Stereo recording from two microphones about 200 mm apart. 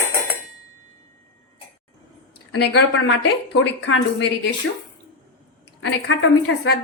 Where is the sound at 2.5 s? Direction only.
55° left (ahead or behind).